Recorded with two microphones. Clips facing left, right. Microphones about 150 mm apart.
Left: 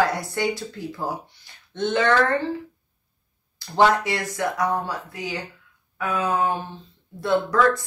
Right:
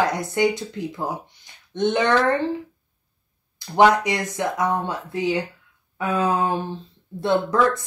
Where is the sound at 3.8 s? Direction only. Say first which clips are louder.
Right 2 dB; 20° right (ahead or behind).